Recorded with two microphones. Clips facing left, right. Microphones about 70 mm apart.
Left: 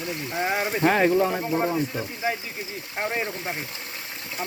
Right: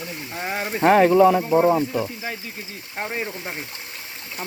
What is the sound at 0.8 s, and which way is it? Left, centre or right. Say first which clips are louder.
Speech: right 7 dB; right.